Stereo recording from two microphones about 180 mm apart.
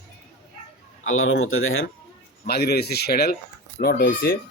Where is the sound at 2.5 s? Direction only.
60° left (ahead or behind).